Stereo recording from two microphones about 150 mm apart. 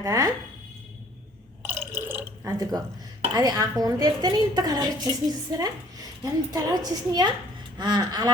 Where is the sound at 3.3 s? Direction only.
25° right (ahead or behind).